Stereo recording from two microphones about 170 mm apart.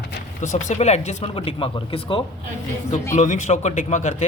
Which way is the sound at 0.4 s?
45° left (ahead or behind).